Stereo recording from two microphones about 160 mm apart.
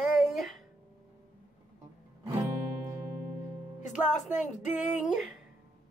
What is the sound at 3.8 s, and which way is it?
Music, 50° left (ahead or behind).